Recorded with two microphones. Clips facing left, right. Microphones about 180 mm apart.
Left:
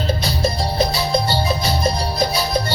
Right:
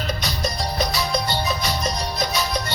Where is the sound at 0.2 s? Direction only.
30° left (ahead or behind).